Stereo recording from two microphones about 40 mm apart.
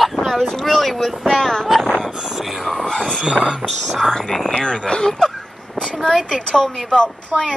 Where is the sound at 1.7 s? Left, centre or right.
Centre.